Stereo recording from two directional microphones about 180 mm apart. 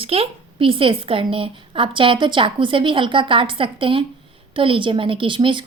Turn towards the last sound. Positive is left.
turn(degrees=-25)  # may be behind; listen again after turning